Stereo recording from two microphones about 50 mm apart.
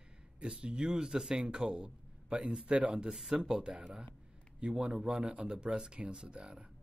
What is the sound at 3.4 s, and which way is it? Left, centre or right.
Speech, centre.